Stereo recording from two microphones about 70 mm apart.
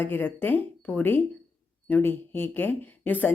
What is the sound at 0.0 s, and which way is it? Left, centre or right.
A woman's voice, left.